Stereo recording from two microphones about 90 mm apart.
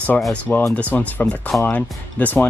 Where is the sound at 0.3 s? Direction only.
15° left (ahead or behind).